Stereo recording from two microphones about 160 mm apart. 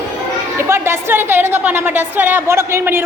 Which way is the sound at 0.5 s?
15° right (ahead or behind).